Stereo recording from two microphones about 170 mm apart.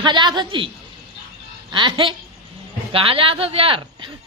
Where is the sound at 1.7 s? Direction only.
30° right (ahead or behind).